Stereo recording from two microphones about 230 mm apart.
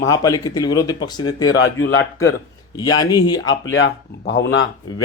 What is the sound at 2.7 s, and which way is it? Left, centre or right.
Speech, centre.